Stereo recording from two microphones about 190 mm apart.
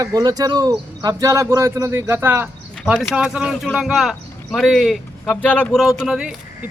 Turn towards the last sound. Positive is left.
turn(degrees=-5)  # may be behind; listen again after turning